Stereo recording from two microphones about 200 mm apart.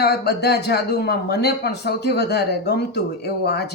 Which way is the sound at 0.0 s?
55° left (ahead or behind).